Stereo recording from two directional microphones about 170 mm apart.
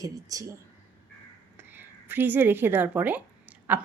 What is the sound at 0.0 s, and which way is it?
Speech, 20° right (ahead or behind).